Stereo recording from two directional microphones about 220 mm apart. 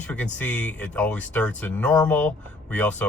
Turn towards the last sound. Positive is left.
turn(degrees=5)  # may be behind; listen again after turning